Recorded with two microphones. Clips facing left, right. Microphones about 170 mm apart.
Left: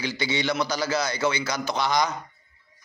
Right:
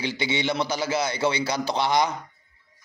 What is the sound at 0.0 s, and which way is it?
A man's voice, 25° right (ahead or behind).